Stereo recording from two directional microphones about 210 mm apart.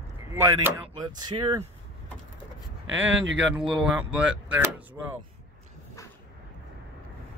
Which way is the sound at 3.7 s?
5° right (ahead or behind).